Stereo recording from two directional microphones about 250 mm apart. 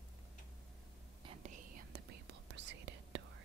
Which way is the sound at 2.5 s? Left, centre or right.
Right.